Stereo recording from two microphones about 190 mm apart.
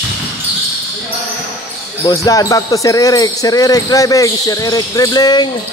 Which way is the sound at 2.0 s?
20° left (ahead or behind).